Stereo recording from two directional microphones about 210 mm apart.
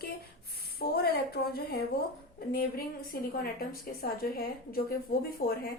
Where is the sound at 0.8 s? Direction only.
50° left (ahead or behind).